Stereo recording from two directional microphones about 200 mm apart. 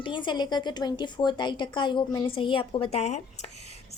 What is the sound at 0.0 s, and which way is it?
A woman's voice, 25° left (ahead or behind).